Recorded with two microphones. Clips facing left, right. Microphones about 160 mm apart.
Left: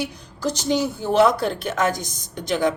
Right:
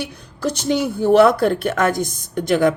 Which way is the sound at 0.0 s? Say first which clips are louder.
Right 2 dB; 60° right (ahead or behind).